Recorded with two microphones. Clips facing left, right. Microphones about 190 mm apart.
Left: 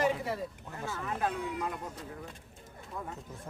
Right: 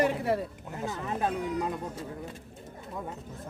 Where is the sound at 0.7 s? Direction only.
20° right (ahead or behind).